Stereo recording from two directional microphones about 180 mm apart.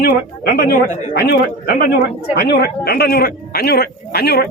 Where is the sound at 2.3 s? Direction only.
65° left (ahead or behind).